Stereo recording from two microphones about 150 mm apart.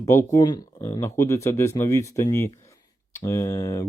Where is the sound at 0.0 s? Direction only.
20° left (ahead or behind).